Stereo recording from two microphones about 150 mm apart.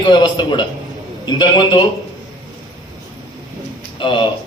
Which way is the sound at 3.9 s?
35° left (ahead or behind).